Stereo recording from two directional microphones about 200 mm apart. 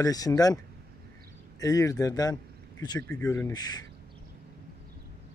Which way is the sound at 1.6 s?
15° left (ahead or behind).